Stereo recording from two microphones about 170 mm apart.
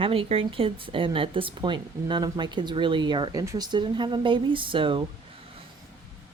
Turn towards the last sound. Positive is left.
turn(degrees=-30)  # may be behind; listen again after turning